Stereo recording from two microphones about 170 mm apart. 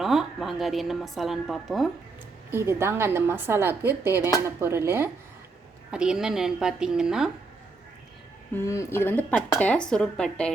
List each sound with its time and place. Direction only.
0.0 s a woman's voice: centre (ahead or behind)
2.5 s a woman's voice: 15° right (ahead or behind)
8.5 s speech: 15° left (ahead or behind)